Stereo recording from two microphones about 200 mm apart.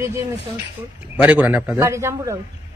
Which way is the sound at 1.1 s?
5° right (ahead or behind).